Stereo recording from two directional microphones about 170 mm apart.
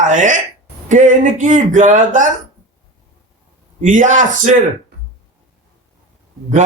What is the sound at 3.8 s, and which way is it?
Speech, 50° right (ahead or behind).